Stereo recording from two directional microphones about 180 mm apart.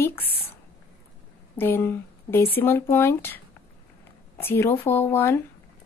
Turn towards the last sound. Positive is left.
turn(degrees=15)  # may be behind; listen again after turning